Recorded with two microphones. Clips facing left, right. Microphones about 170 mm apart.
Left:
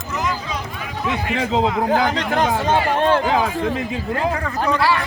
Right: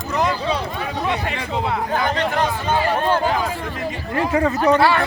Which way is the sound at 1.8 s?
90° left.